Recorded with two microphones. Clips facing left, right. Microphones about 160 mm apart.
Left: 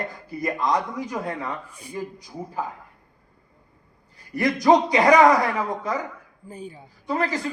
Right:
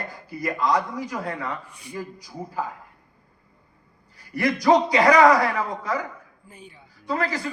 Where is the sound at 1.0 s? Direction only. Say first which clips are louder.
Left 1 dB; 25° left (ahead or behind).